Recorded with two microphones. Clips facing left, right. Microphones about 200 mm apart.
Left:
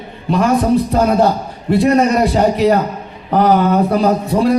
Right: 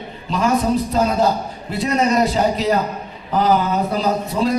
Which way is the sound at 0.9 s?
60° left (ahead or behind).